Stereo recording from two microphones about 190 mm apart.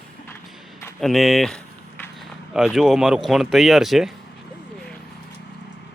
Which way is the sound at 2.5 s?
Centre (ahead or behind).